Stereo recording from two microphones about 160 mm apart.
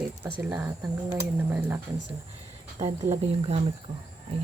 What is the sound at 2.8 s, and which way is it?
Speech, 25° right (ahead or behind).